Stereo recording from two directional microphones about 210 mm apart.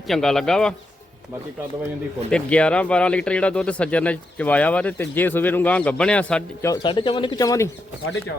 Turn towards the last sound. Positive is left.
turn(degrees=15)  # may be behind; listen again after turning